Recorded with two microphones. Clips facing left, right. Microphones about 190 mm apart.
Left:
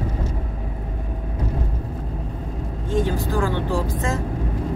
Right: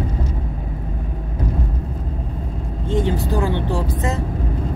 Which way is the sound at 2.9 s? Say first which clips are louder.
Right 2 dB; 20° right (ahead or behind).